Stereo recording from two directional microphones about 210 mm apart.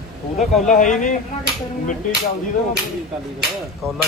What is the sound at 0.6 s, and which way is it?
Speech, 35° left (ahead or behind).